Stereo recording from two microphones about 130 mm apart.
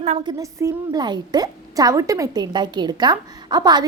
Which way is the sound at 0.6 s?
35° right (ahead or behind).